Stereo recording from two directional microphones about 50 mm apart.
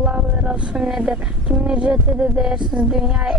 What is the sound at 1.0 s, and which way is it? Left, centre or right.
Speech, right.